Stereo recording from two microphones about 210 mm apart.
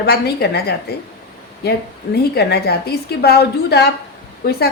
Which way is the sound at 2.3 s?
50° left (ahead or behind).